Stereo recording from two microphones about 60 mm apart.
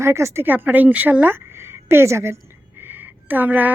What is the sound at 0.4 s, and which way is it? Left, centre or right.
Speech, right.